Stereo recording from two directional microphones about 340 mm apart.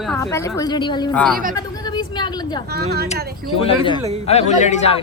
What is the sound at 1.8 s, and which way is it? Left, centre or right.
Vehicle, centre.